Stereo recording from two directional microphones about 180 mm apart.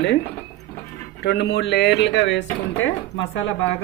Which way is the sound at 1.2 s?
70° left (ahead or behind).